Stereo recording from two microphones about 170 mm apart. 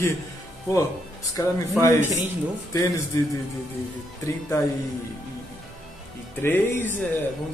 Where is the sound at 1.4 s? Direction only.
20° left (ahead or behind).